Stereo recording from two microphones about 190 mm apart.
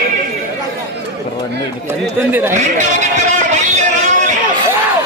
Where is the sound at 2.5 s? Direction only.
40° right (ahead or behind).